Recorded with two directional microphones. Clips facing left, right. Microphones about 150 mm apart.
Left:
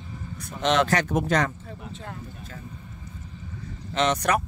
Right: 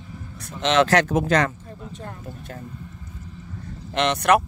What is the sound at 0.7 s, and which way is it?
Speech, 90° right.